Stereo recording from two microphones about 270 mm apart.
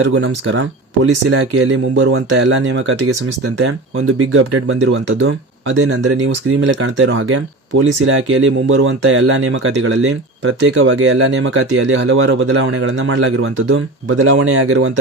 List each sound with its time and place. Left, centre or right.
0.0 s speech: right